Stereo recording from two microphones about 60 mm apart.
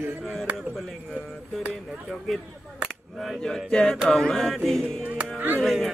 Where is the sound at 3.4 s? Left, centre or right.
Centre.